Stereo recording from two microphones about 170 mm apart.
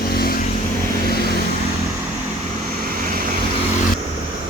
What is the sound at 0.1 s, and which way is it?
Vehicle, 65° left (ahead or behind).